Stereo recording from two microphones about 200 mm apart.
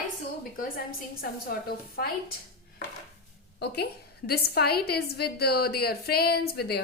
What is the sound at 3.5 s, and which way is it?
A woman's voice, 55° left (ahead or behind).